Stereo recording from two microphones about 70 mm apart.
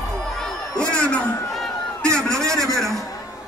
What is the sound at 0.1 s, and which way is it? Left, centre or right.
Crowd, centre.